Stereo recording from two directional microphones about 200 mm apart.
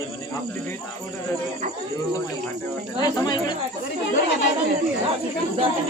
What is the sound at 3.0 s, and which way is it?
Speech, 20° left (ahead or behind).